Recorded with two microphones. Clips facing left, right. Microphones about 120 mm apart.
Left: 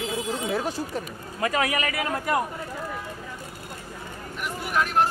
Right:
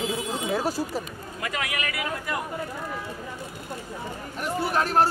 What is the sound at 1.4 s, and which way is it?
Speech, 35° left (ahead or behind).